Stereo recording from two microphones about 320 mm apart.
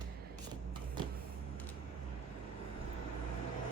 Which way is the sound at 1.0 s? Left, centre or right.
Centre.